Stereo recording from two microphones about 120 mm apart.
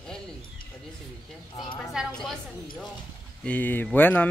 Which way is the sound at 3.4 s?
15° left (ahead or behind).